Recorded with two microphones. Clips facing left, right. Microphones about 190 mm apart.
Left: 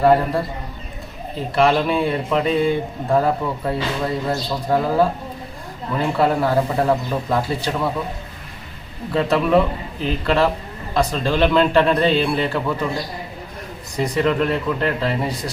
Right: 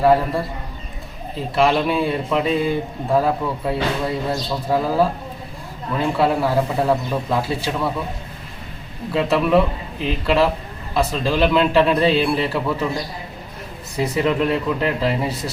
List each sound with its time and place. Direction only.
0.0 s speech: centre (ahead or behind)
1.5 s speech: centre (ahead or behind)
9.3 s speech: centre (ahead or behind)
14.0 s speech: 5° right (ahead or behind)